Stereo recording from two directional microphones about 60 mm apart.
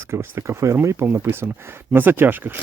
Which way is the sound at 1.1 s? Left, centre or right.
Right.